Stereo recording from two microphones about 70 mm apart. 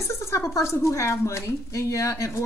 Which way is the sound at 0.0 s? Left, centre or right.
Left.